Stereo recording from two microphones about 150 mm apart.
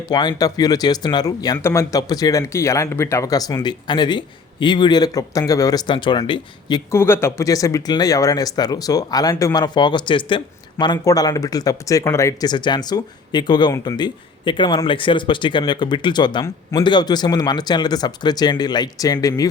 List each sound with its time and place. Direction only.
0.1 s speech: 30° left (ahead or behind)
6.9 s speech: 15° left (ahead or behind)